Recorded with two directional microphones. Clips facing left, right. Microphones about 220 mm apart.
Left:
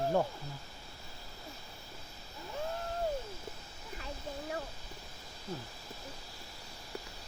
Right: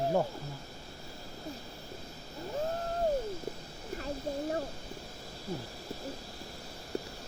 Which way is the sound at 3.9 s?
40° right (ahead or behind).